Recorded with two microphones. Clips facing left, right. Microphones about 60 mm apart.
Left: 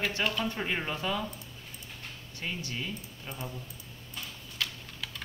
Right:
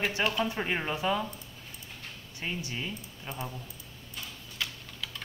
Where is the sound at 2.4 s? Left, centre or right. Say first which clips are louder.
Right 1 dB; centre.